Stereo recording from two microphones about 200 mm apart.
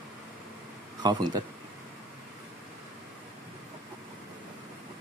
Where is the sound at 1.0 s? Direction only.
20° right (ahead or behind).